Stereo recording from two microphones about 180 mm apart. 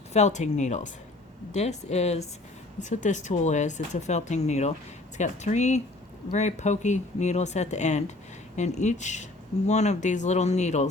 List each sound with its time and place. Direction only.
0.1 s speech: 40° left (ahead or behind)